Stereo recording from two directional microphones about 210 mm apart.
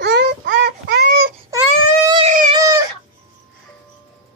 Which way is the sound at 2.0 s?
25° right (ahead or behind).